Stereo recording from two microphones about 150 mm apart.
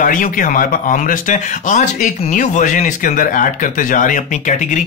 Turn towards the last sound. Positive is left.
turn(degrees=55)  # may be behind; listen again after turning